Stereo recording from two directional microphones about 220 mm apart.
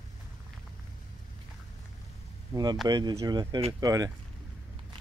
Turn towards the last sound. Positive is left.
turn(degrees=-15)  # may be behind; listen again after turning